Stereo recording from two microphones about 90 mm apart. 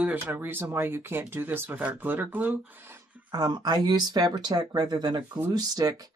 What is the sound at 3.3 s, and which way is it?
Speech, 45° right (ahead or behind).